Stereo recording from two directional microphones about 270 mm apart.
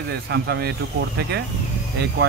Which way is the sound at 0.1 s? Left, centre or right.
Right.